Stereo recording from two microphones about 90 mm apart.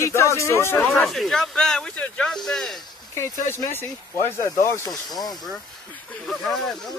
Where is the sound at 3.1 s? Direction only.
30° left (ahead or behind).